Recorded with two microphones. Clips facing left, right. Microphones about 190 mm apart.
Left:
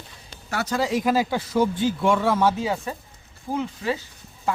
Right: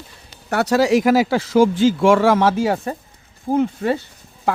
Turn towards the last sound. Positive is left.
turn(degrees=-55)  # may be behind; listen again after turning